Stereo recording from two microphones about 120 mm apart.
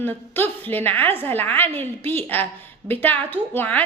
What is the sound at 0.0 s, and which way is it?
A woman's voice, 15° left (ahead or behind).